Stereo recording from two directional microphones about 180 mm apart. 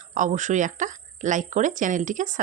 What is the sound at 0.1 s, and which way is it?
Speech, 45° right (ahead or behind).